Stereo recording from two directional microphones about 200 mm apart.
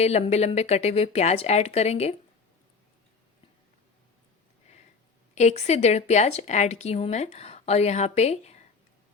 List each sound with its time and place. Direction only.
0.0 s speech: 35° left (ahead or behind)
5.3 s speech: 35° left (ahead or behind)